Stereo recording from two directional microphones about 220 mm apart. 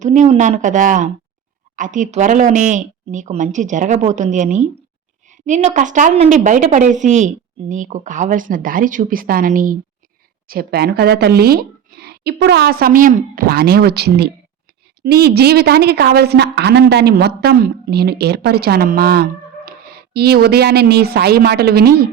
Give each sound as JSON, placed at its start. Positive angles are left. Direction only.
{"t": 0.0, "sound": "a woman's voice", "side_deg": -30}